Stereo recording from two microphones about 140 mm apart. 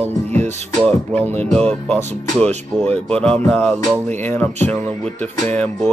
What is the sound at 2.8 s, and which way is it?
Speech, 45° right (ahead or behind).